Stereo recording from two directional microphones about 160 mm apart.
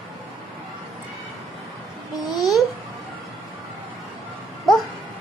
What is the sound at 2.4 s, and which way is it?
Babbling, centre (ahead or behind).